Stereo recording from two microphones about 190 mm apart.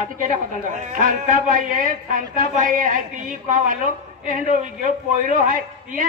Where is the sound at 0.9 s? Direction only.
45° right (ahead or behind).